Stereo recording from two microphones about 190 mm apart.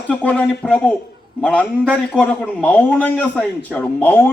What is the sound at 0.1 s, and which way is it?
A man's voice, 5° left (ahead or behind).